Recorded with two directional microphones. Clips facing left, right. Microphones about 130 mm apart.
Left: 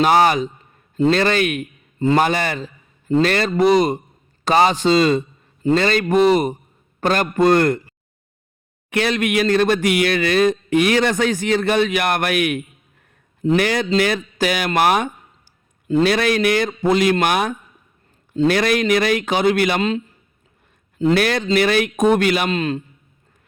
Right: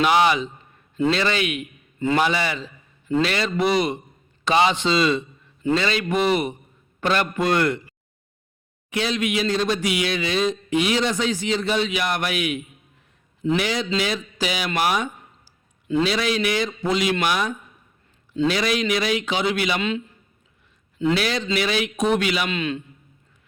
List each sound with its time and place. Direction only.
0.0 s a man's voice: 45° left (ahead or behind)
8.9 s a man's voice: 60° left (ahead or behind)
13.4 s a man's voice: 40° left (ahead or behind)
13.7 s a man's voice: 55° left (ahead or behind)
21.0 s a man's voice: 50° left (ahead or behind)